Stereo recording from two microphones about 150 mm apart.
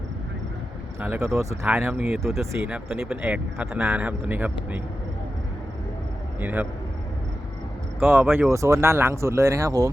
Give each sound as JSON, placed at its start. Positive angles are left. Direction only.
{"t": 1.0, "sound": "speech", "side_deg": -10}
{"t": 1.6, "sound": "speech", "side_deg": -5}
{"t": 6.4, "sound": "speech", "side_deg": -10}
{"t": 7.9, "sound": "speech", "side_deg": -15}